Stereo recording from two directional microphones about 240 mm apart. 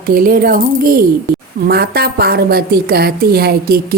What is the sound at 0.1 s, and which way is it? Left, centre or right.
A woman's voice, right.